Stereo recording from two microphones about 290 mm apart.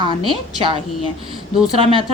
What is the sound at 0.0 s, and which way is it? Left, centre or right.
A woman's voice, centre.